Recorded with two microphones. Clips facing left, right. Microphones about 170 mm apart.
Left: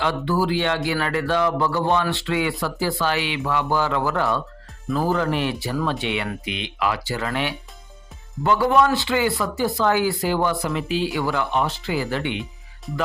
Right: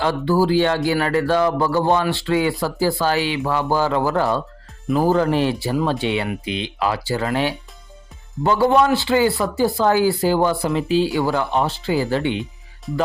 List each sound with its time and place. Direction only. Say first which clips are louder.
0.0 s speech: right 4 dB; 35° right (ahead or behind)